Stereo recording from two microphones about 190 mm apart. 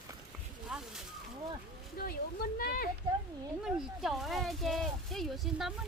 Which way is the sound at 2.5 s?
50° left (ahead or behind).